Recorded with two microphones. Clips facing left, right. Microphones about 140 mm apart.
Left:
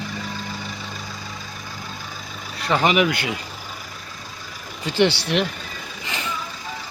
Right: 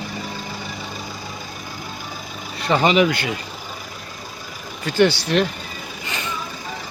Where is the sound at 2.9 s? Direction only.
10° left (ahead or behind).